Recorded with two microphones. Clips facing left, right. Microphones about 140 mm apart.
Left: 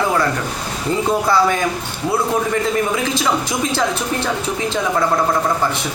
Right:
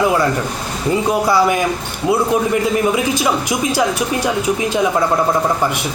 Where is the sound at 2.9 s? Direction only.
15° right (ahead or behind).